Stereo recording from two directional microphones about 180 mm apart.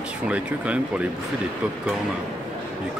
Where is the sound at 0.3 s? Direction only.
5° right (ahead or behind).